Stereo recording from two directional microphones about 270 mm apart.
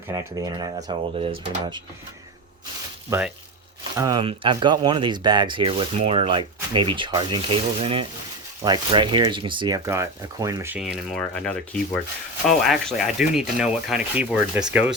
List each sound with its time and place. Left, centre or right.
0.1 s speech: centre
3.1 s speech: centre